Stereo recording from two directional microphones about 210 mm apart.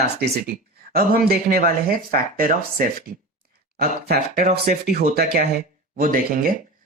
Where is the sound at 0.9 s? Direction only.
45° right (ahead or behind).